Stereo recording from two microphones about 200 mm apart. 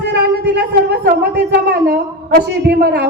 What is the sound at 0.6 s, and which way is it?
A woman's voice, 55° right (ahead or behind).